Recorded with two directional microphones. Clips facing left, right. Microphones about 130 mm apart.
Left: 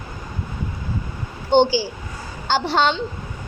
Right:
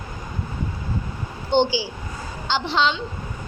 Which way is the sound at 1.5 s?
45° left (ahead or behind).